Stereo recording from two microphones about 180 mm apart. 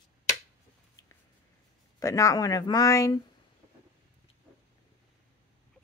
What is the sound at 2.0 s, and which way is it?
Speech, 20° left (ahead or behind).